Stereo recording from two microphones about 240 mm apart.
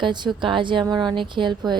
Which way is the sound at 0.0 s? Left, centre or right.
Centre.